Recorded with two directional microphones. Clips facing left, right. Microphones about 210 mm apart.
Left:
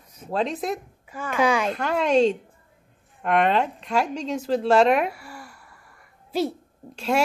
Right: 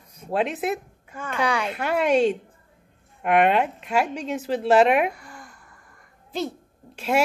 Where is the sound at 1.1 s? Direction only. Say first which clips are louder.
Left 4 dB; 5° left (ahead or behind).